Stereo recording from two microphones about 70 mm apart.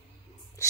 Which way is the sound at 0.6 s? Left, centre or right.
Left.